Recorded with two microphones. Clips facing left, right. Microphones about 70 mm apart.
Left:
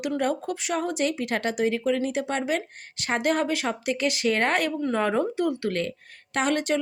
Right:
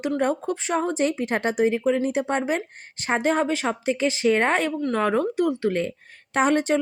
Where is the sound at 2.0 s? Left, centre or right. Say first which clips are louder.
Right 3 dB; right.